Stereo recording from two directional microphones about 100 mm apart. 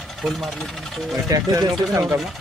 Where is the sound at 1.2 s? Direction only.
35° right (ahead or behind).